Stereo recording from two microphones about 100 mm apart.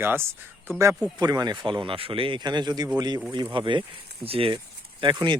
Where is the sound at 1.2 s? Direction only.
40° right (ahead or behind).